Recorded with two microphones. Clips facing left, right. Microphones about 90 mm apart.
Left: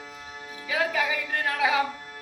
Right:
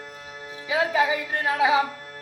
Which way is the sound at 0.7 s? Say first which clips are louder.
Right 4 dB; 25° right (ahead or behind).